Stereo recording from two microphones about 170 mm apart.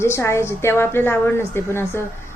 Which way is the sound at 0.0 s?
15° left (ahead or behind).